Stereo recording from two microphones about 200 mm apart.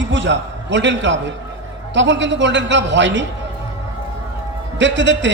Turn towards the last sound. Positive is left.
turn(degrees=-65)  # may be behind; listen again after turning